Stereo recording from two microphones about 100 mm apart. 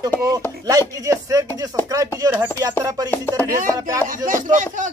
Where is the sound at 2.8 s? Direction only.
40° right (ahead or behind).